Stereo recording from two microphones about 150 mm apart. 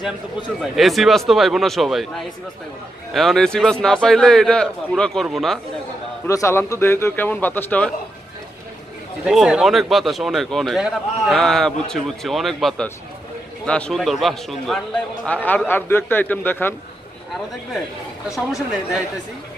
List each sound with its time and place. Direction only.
0.6 s a man's voice: centre (ahead or behind)
6.2 s a man's voice: 20° left (ahead or behind)
9.2 s a man's voice: 5° right (ahead or behind); by 16.7 s 10° left (ahead or behind)
18.3 s a man's voice: centre (ahead or behind)